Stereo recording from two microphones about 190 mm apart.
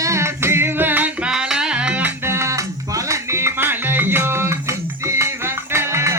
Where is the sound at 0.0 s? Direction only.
15° right (ahead or behind).